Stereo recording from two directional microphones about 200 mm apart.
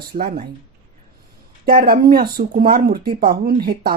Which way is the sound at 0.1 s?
45° right (ahead or behind).